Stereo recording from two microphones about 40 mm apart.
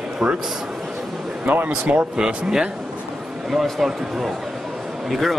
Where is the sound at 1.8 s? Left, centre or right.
Right.